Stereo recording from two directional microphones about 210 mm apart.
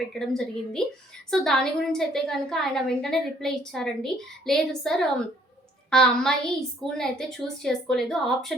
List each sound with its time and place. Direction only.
0.1 s a woman's voice: centre (ahead or behind)